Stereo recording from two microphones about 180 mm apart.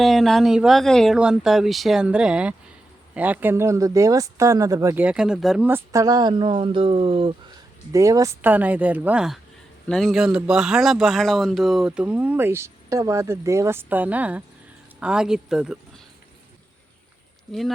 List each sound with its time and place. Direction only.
0.0 s speech: centre (ahead or behind)
5.6 s speech: 15° right (ahead or behind)
7.9 s speech: 15° right (ahead or behind)